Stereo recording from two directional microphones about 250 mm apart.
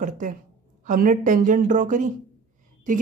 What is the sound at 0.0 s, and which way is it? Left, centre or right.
A woman's voice, right.